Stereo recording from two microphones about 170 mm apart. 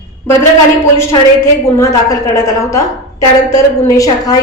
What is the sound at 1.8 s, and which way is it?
A woman's voice, 15° left (ahead or behind).